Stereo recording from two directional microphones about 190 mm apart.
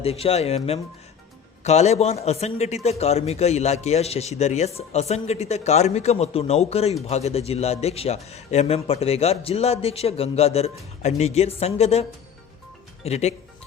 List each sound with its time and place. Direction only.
0.0 s a man's voice: 30° left (ahead or behind)